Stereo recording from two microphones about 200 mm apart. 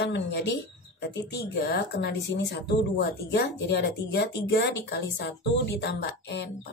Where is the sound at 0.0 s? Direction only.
60° left (ahead or behind).